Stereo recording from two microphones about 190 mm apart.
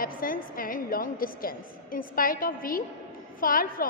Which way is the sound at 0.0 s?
50° left (ahead or behind).